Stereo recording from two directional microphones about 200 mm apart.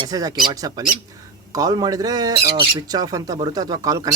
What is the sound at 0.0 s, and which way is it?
Speech, 20° right (ahead or behind).